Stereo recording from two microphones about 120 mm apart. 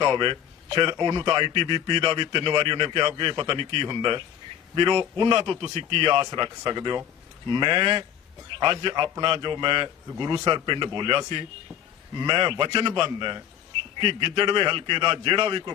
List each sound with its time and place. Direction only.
0.0 s a man's voice: 40° right (ahead or behind)